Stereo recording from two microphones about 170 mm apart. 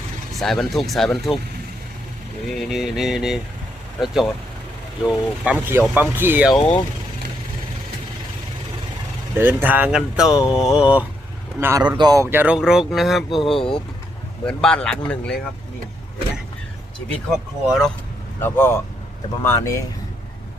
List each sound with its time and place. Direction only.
0.3 s speech: centre (ahead or behind)
2.5 s speech: centre (ahead or behind)
6.5 s speech: 25° left (ahead or behind)
9.3 s speech: 10° right (ahead or behind)
11.9 s speech: 20° right (ahead or behind); by 15.4 s 5° left (ahead or behind)
17.7 s speech: centre (ahead or behind)
18.3 s speech: 15° left (ahead or behind)